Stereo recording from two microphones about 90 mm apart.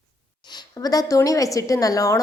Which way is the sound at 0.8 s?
45° left (ahead or behind).